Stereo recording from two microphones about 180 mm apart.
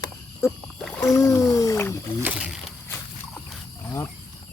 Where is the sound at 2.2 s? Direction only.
5° right (ahead or behind).